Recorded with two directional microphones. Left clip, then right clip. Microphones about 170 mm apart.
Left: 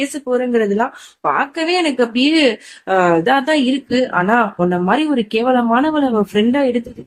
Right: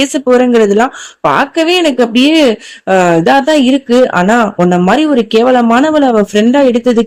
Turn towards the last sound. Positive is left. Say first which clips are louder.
# right 7 dB
turn(degrees=-40)  # may be behind; listen again after turning